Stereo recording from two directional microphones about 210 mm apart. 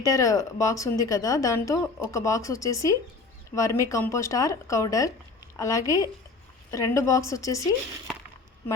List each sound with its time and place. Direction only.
0.0 s speech: 15° left (ahead or behind)